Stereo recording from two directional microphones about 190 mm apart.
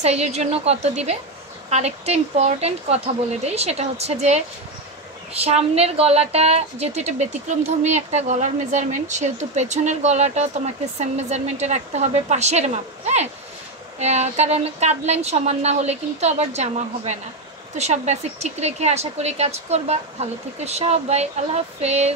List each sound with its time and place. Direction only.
0.0 s a woman's voice: 35° right (ahead or behind)